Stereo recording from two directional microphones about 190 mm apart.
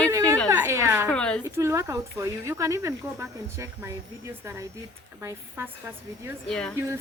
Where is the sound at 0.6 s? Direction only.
15° right (ahead or behind).